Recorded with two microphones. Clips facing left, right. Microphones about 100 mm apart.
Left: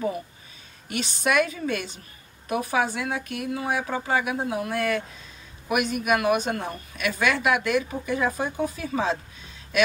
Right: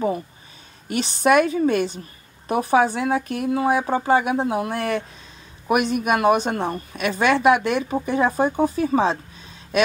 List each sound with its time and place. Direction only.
0.8 s a woman's voice: 35° right (ahead or behind)